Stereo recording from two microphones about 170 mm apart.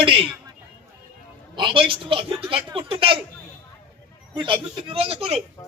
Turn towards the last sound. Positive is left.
turn(degrees=-35)  # may be behind; listen again after turning